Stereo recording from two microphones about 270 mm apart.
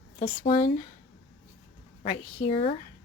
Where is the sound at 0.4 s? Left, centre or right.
Centre.